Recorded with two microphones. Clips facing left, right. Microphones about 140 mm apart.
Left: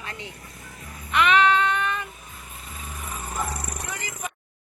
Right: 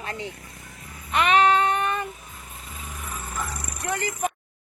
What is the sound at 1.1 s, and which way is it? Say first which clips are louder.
Child singing: even; 40° right (ahead or behind).